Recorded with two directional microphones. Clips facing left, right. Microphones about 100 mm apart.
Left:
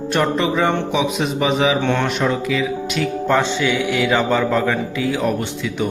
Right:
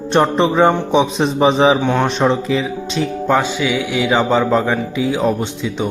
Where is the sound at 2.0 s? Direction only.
25° right (ahead or behind).